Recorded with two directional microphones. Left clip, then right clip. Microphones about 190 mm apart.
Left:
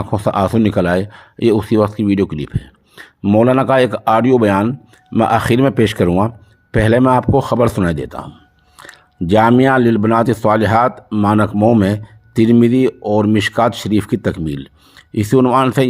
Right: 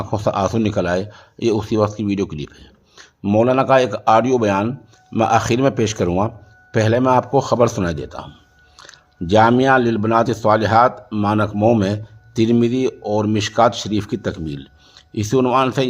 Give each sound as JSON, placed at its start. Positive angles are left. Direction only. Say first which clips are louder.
{"t": 0.0, "sound": "speech", "louder": "left 3 dB", "side_deg": 20}